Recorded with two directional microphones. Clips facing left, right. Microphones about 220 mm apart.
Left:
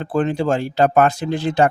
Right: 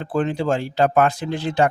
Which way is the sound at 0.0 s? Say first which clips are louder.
Left 2 dB; 50° left (ahead or behind).